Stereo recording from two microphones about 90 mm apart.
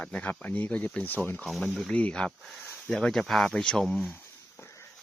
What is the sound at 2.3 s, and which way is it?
Speech, centre (ahead or behind).